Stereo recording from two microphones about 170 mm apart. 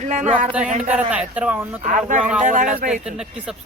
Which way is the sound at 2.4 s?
50° right (ahead or behind).